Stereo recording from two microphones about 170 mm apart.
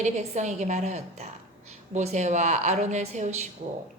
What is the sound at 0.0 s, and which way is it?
A woman's voice, 45° right (ahead or behind).